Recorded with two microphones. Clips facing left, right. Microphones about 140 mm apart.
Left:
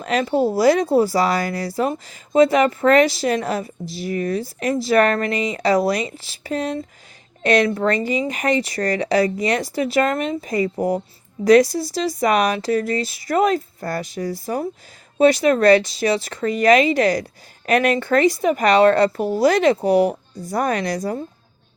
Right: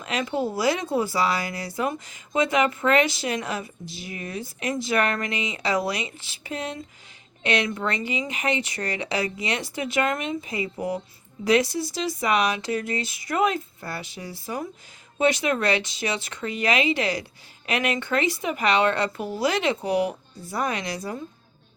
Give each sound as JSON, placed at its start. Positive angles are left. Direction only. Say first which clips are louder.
{"t": 0.0, "sound": "speech", "louder": "left 7 dB", "side_deg": 35}